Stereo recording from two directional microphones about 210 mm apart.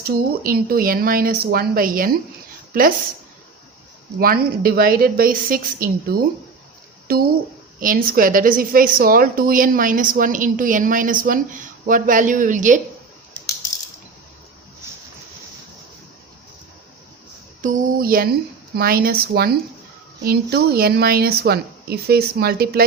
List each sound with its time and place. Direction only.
0.0 s a woman's voice: 45° right (ahead or behind)
4.2 s a woman's voice: 45° right (ahead or behind)
17.6 s a woman's voice: 40° right (ahead or behind)